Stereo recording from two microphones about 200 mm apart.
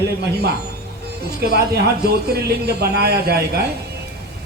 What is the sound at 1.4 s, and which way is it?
Speech, 55° right (ahead or behind).